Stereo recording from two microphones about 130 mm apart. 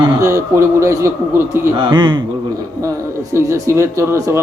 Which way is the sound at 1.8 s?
35° right (ahead or behind).